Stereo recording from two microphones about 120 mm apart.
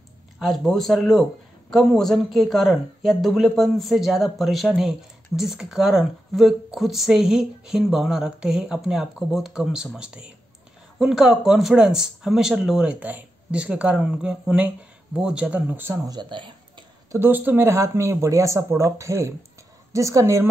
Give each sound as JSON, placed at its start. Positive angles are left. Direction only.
{"t": 0.4, "sound": "speech", "side_deg": 0}
{"t": 16.1, "sound": "speech", "side_deg": -40}
{"t": 17.1, "sound": "speech", "side_deg": -20}